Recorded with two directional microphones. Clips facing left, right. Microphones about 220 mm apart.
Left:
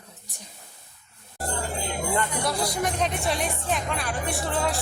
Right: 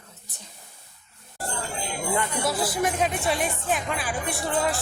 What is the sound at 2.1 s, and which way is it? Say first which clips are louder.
Speech: right 1 dB; 5° right (ahead or behind).